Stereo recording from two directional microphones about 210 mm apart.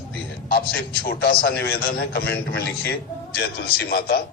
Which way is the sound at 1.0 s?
45° left (ahead or behind).